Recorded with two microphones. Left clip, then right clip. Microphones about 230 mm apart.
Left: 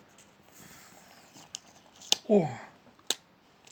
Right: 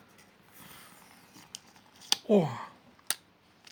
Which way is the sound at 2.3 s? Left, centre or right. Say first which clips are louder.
Even; right.